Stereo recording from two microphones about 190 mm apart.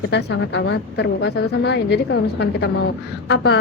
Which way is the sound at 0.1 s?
60° left (ahead or behind).